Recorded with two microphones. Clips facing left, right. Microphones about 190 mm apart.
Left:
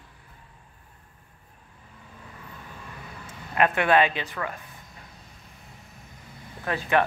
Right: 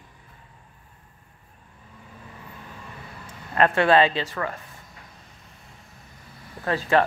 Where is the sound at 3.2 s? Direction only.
10° left (ahead or behind).